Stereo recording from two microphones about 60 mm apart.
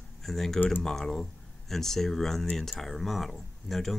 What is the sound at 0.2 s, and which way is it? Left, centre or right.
Speech, centre.